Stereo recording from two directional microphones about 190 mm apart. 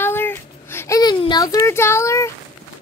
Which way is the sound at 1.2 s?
20° left (ahead or behind).